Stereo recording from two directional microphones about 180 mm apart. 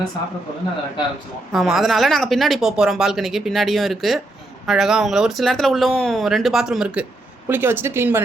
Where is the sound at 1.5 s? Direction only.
Centre (ahead or behind).